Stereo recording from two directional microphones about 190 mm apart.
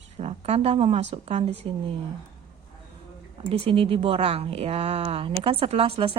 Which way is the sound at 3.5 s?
30° right (ahead or behind).